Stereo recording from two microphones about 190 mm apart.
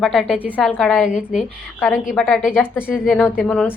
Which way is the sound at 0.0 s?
Centre (ahead or behind).